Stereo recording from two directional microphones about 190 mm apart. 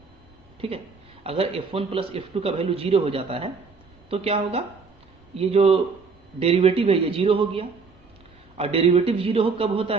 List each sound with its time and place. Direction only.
0.6 s a woman's voice: 30° right (ahead or behind)